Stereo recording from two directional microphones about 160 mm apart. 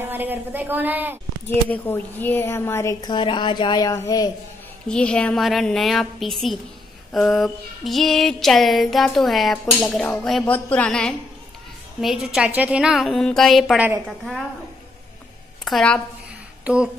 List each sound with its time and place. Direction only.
0.0 s a woman's voice: 10° right (ahead or behind)
1.5 s a woman's voice: 10° left (ahead or behind)
4.8 s female singing: 5° left (ahead or behind)
15.6 s a woman's voice: 5° left (ahead or behind)